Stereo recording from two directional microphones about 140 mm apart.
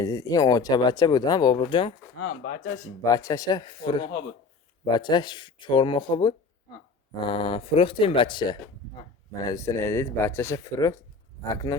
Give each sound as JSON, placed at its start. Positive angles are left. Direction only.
{"t": 0.0, "sound": "speech", "side_deg": 25}
{"t": 3.0, "sound": "speech", "side_deg": 25}